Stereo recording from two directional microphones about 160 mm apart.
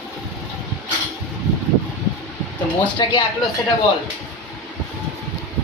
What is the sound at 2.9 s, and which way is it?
Speech, 25° left (ahead or behind).